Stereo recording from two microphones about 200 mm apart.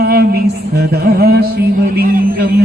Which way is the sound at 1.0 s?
50° right (ahead or behind).